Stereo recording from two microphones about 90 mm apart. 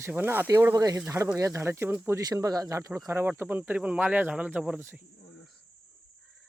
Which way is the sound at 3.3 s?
20° right (ahead or behind).